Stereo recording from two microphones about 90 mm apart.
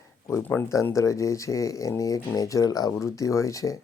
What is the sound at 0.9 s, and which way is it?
Speech, 35° left (ahead or behind).